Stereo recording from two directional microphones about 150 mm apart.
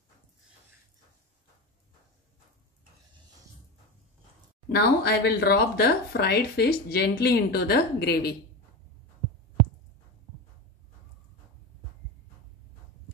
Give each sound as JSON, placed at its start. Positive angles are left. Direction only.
{"t": 4.6, "sound": "speech", "side_deg": 90}